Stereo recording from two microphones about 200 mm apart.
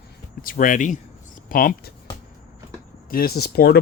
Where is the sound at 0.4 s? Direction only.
45° left (ahead or behind).